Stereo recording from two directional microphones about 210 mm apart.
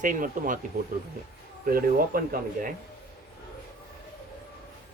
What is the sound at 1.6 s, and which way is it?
Speech, 45° right (ahead or behind).